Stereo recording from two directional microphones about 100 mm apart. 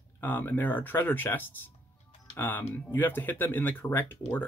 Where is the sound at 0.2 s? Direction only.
20° left (ahead or behind).